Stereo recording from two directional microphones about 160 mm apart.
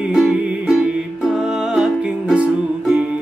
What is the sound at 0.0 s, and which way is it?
Music, 5° right (ahead or behind).